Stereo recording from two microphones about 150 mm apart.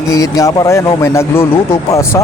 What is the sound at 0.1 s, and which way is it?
A man's voice, 25° left (ahead or behind).